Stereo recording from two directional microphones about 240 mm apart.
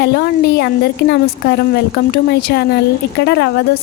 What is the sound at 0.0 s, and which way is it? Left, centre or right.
Speech, left.